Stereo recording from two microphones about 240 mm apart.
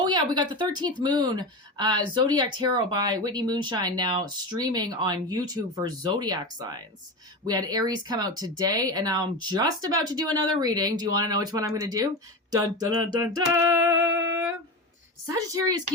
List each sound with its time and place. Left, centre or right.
0.0 s speech: centre
15.3 s speech: centre